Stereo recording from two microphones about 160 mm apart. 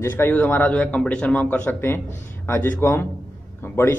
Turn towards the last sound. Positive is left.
turn(degrees=15)  # may be behind; listen again after turning